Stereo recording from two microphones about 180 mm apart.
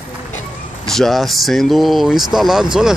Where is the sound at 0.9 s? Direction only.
Centre (ahead or behind).